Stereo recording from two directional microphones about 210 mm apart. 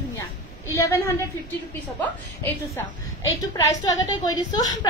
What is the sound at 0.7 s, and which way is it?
A woman's voice, 15° left (ahead or behind).